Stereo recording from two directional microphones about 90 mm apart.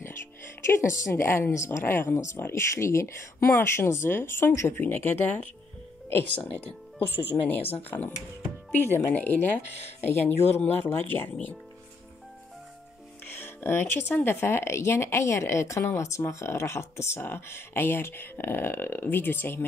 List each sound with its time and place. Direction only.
0.7 s speech: 30° left (ahead or behind)
10.6 s speech: 25° left (ahead or behind)
13.2 s speech: 25° left (ahead or behind)